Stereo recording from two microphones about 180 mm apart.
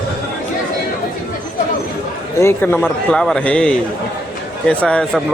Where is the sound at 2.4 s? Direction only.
15° left (ahead or behind).